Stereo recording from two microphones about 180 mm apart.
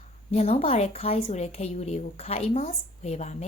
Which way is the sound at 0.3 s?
35° left (ahead or behind).